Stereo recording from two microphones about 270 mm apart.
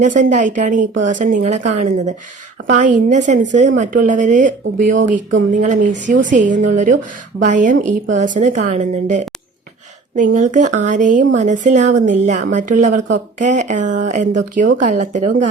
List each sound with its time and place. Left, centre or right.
0.0 s speech: right